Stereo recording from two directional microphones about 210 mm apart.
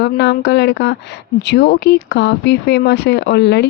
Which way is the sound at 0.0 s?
55° left (ahead or behind).